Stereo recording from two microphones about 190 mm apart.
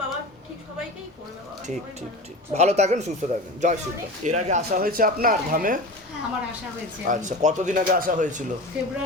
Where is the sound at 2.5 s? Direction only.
35° right (ahead or behind).